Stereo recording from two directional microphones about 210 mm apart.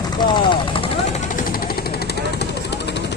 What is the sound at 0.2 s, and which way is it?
Vehicle, 20° left (ahead or behind).